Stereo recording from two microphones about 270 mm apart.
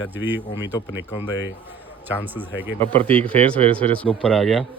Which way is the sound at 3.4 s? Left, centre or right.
Centre.